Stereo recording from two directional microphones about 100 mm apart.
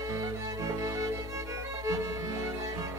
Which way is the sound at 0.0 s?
35° right (ahead or behind).